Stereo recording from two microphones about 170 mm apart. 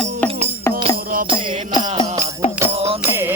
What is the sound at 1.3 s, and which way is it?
Music, 25° right (ahead or behind).